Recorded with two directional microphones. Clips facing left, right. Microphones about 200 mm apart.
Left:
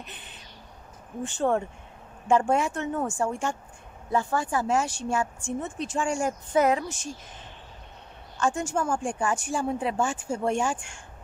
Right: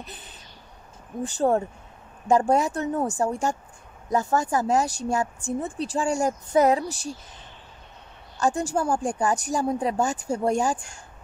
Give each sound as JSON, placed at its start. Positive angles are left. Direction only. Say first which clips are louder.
{"t": 1.2, "sound": "speech", "louder": "right 3 dB", "side_deg": -35}
{"t": 8.4, "sound": "speech", "louder": "right 3 dB", "side_deg": -35}